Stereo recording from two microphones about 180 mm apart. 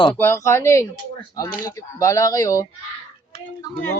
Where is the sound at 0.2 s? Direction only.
15° left (ahead or behind).